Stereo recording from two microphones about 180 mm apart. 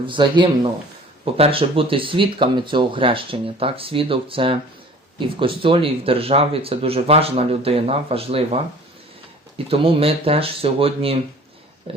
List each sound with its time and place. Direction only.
0.0 s speech: 25° right (ahead or behind)
9.6 s speech: 30° right (ahead or behind)